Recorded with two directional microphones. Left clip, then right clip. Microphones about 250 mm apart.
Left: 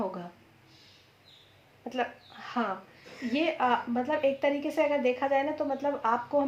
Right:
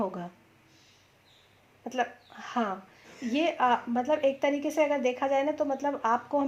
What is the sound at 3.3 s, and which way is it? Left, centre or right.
Speech, right.